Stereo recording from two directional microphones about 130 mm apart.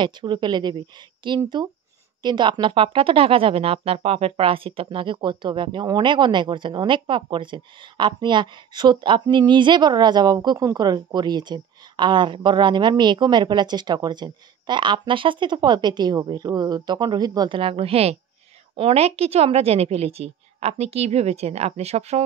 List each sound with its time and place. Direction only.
0.0 s speech: 35° right (ahead or behind)
17.6 s a woman's voice: 45° right (ahead or behind)